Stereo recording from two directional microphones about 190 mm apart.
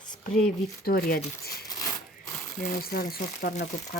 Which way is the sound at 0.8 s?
55° left (ahead or behind).